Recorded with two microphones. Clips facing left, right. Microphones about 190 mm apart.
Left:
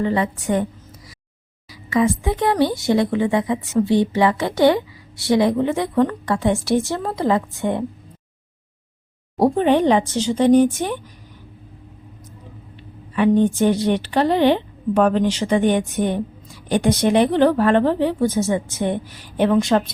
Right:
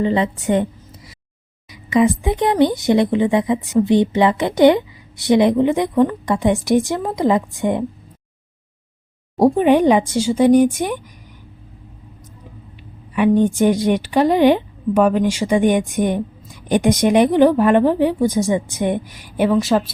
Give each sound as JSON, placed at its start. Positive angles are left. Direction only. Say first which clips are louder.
{"t": 0.0, "sound": "a woman's voice", "louder": "right 3 dB", "side_deg": -20}
{"t": 9.4, "sound": "a woman's voice", "louder": "right 3 dB", "side_deg": -10}
{"t": 13.1, "sound": "a woman's voice", "louder": "right 1 dB", "side_deg": -15}